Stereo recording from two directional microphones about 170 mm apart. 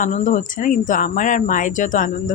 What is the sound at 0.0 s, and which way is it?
Speech, 50° left (ahead or behind).